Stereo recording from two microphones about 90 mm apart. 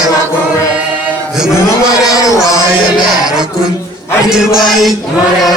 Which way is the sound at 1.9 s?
40° left (ahead or behind).